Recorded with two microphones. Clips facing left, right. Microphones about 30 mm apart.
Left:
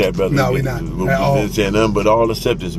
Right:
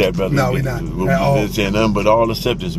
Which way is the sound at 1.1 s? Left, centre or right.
Centre.